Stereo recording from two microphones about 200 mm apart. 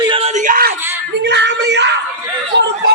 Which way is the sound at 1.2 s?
60° right (ahead or behind).